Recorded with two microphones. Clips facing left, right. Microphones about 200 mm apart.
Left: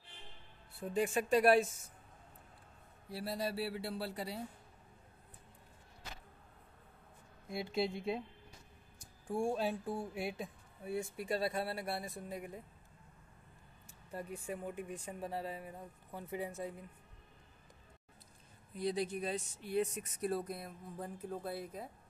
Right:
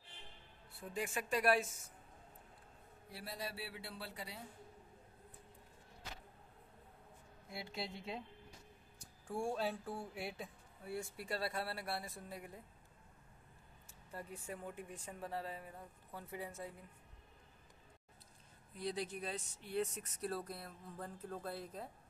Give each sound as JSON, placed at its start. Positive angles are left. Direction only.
{"t": 0.9, "sound": "speech", "side_deg": 30}
{"t": 3.1, "sound": "speech", "side_deg": 35}
{"t": 7.4, "sound": "speech", "side_deg": 20}
{"t": 9.3, "sound": "speech", "side_deg": 15}
{"t": 14.1, "sound": "speech", "side_deg": 15}
{"t": 18.8, "sound": "speech", "side_deg": 15}